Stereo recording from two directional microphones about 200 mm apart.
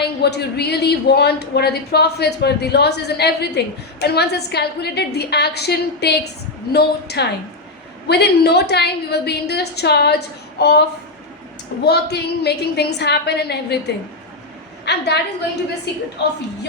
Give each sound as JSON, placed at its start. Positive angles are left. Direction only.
{"t": 0.0, "sound": "speech", "side_deg": 55}
{"t": 11.9, "sound": "speech", "side_deg": 55}
{"t": 14.8, "sound": "speech", "side_deg": 55}